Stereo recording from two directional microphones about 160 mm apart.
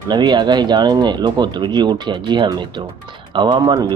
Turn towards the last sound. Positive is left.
turn(degrees=-25)  # may be behind; listen again after turning